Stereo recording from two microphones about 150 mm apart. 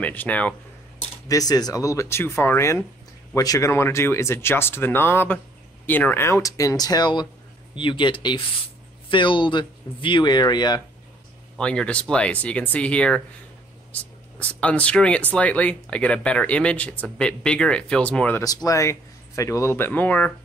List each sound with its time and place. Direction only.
0.0 s speech: 10° left (ahead or behind)
1.3 s speech: 25° left (ahead or behind)
11.5 s speech: 5° left (ahead or behind)
18.4 s speech: 25° left (ahead or behind); by 20.3 s 10° left (ahead or behind)